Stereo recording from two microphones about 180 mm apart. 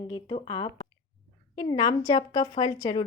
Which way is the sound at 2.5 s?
45° left (ahead or behind).